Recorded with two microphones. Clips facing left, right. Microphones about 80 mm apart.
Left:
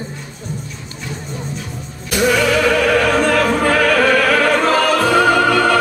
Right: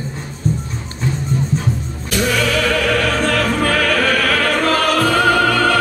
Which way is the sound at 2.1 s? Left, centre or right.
Centre.